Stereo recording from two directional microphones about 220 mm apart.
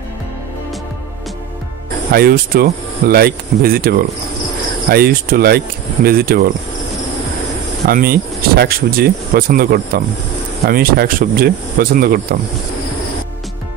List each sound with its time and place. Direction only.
2.1 s speech: 45° right (ahead or behind)
7.8 s speech: 45° right (ahead or behind)